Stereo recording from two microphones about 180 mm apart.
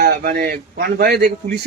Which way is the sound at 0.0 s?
60° right (ahead or behind).